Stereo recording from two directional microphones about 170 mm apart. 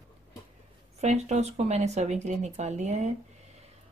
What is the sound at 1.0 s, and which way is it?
A woman's voice, 40° right (ahead or behind).